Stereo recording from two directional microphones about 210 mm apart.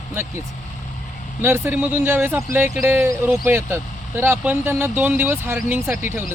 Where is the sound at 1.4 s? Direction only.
10° right (ahead or behind).